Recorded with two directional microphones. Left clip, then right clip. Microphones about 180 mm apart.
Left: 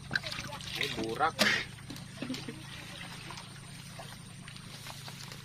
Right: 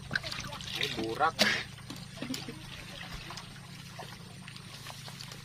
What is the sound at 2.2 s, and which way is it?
Water, 65° right (ahead or behind).